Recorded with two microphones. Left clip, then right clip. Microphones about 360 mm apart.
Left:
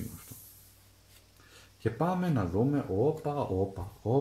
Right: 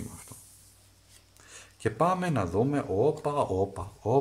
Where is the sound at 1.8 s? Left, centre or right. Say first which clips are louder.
Right 5 dB; right.